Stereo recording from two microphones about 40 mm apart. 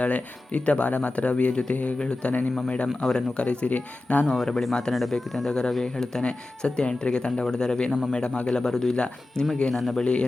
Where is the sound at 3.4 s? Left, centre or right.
Left.